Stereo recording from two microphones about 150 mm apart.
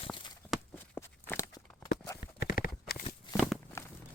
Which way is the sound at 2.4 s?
80° left.